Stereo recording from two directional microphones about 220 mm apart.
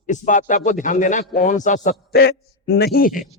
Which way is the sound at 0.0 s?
35° left (ahead or behind).